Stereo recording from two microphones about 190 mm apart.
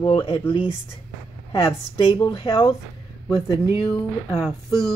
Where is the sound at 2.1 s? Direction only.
25° left (ahead or behind).